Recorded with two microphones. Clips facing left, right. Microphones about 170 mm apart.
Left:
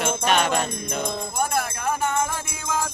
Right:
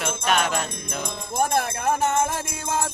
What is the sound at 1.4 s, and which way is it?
Music, 45° right (ahead or behind).